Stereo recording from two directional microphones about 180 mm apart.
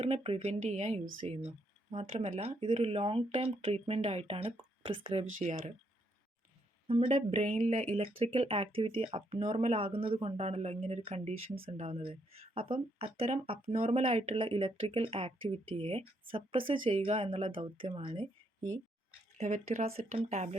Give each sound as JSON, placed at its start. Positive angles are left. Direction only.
{"t": 0.0, "sound": "speech", "side_deg": -35}
{"t": 6.8, "sound": "speech", "side_deg": -30}
{"t": 19.4, "sound": "speech", "side_deg": -40}